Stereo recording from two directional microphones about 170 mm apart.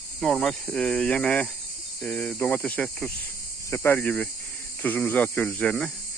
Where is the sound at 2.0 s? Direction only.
5° left (ahead or behind).